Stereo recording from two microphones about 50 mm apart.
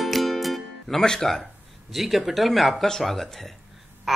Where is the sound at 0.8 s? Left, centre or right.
Centre.